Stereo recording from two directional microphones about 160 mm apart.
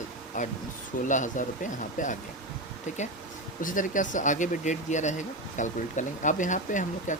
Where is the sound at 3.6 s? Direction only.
55° left (ahead or behind).